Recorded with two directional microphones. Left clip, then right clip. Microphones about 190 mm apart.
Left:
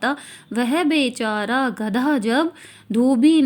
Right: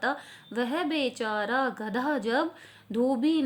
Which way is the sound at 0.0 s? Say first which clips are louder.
Left 7 dB; 25° left (ahead or behind).